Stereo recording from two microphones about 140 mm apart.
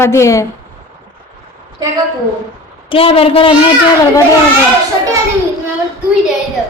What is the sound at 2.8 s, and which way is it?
Speech, 40° left (ahead or behind).